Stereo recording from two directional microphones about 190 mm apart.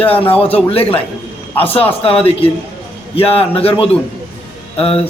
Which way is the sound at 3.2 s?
30° left (ahead or behind).